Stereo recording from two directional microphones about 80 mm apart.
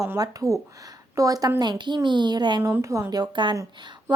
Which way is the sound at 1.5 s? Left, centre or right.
Right.